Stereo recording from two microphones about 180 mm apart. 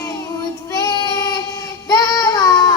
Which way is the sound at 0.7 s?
20° left (ahead or behind).